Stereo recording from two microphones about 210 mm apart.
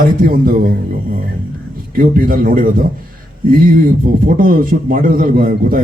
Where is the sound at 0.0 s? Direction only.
45° right (ahead or behind).